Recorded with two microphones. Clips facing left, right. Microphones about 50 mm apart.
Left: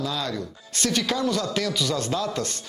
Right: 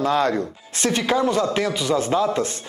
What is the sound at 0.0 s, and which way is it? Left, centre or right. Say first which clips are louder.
Speech: right 9 dB; right.